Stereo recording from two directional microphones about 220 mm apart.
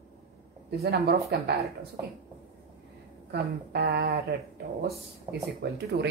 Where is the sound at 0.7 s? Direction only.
45° right (ahead or behind).